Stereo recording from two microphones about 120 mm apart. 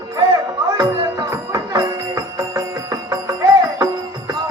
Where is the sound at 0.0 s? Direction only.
35° right (ahead or behind).